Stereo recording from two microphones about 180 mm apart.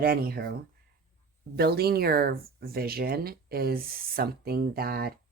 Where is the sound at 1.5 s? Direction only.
60° right (ahead or behind).